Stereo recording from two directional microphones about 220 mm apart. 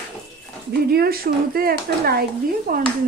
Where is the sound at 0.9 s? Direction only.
45° right (ahead or behind).